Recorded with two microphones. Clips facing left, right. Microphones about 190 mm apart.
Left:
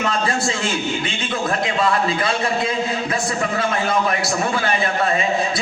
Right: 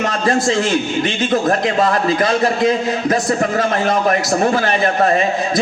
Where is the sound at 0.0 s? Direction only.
40° right (ahead or behind).